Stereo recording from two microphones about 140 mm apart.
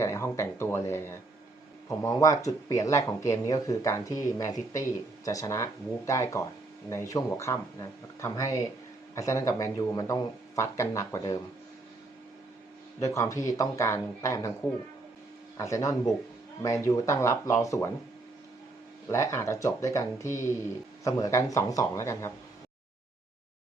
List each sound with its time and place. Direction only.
0.0 s speech: 20° left (ahead or behind)
13.0 s speech: 25° left (ahead or behind)
15.5 s speech: 20° left (ahead or behind)
19.1 s speech: 20° left (ahead or behind)